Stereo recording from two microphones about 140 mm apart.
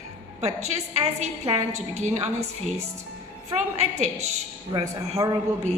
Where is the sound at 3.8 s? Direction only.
50° right (ahead or behind).